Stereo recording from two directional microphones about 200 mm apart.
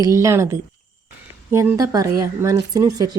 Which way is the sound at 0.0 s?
15° right (ahead or behind).